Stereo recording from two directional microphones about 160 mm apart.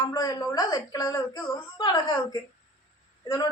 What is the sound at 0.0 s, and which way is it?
Speech, 25° left (ahead or behind).